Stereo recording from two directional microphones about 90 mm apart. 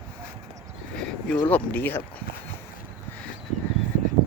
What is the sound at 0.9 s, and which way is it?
Speech, 15° left (ahead or behind).